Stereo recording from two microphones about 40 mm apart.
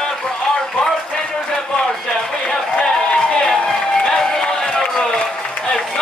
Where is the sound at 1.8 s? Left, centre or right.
Centre.